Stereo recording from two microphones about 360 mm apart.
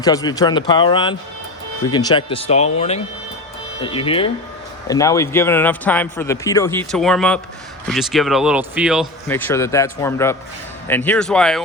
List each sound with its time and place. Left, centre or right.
0.0 s a man's voice: centre